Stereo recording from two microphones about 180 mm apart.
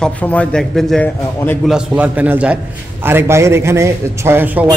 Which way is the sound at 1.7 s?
10° right (ahead or behind).